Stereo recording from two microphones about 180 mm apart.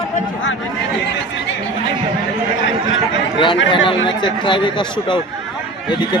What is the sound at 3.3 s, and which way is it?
Speech, 30° left (ahead or behind).